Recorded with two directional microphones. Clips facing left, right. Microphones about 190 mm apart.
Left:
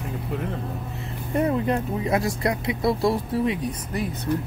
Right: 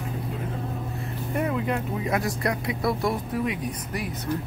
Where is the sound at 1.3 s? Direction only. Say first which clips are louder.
Left 4 dB; 35° left (ahead or behind).